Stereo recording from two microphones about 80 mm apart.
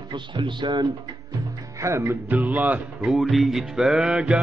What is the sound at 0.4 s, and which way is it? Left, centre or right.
Speech, right.